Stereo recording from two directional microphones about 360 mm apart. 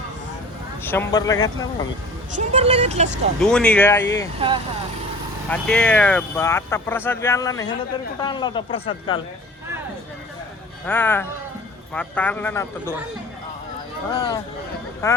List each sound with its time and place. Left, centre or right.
0.9 s speech: centre
2.3 s speech: centre
3.4 s speech: centre
4.4 s speech: centre
5.5 s speech: centre
10.8 s speech: centre
14.1 s speech: centre